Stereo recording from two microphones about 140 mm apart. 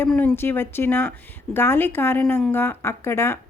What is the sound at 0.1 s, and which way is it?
Speech, 15° left (ahead or behind).